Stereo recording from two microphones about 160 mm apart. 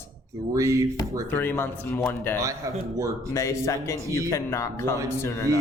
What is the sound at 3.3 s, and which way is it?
A man's voice, 20° left (ahead or behind).